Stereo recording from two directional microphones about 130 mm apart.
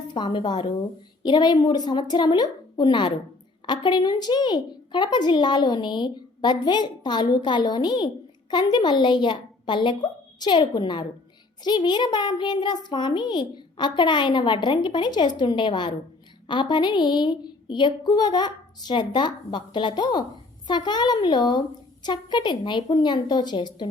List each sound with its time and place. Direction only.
0.1 s a woman's voice: 35° left (ahead or behind)